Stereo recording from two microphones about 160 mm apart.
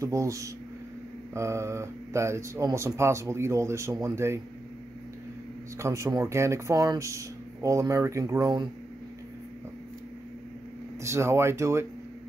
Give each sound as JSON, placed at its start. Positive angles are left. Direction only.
{"t": 0.0, "sound": "speech", "side_deg": -20}
{"t": 5.8, "sound": "speech", "side_deg": -20}
{"t": 11.0, "sound": "speech", "side_deg": -15}